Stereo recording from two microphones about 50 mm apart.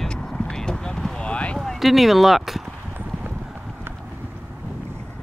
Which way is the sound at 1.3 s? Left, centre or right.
Left.